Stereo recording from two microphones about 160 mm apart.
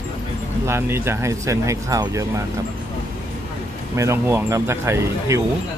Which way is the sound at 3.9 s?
20° right (ahead or behind).